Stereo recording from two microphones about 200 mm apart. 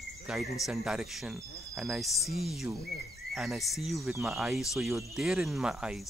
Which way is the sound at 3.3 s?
Centre (ahead or behind).